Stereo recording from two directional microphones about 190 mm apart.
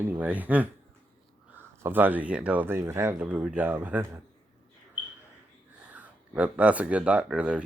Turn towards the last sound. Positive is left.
turn(degrees=-5)  # may be behind; listen again after turning